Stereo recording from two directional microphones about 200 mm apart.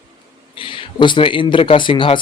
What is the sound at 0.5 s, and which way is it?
Speech, 25° left (ahead or behind).